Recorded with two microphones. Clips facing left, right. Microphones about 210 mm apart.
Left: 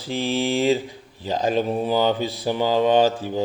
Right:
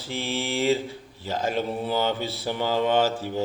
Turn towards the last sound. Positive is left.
turn(degrees=15)  # may be behind; listen again after turning